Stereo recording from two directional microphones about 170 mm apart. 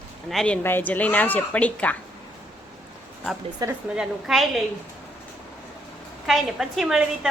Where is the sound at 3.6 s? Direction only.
20° right (ahead or behind).